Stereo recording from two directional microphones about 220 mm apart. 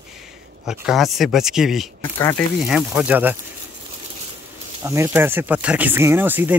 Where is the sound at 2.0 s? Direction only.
15° left (ahead or behind).